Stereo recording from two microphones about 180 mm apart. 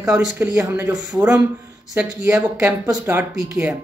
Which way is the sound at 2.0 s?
10° right (ahead or behind).